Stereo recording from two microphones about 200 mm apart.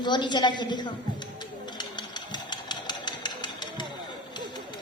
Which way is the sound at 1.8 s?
20° left (ahead or behind).